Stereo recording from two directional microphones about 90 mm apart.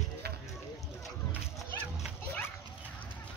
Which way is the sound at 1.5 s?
5° right (ahead or behind).